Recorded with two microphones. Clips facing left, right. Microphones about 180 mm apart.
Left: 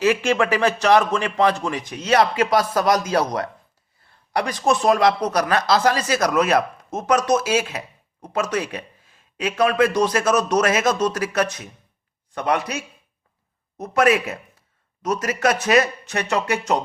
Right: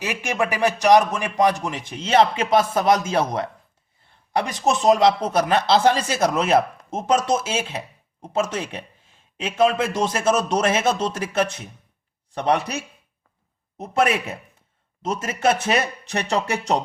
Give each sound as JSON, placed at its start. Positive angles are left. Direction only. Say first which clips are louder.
{"t": 0.0, "sound": "speech", "louder": "left 6 dB", "side_deg": -15}
{"t": 1.8, "sound": "speech", "louder": "right 1 dB", "side_deg": -25}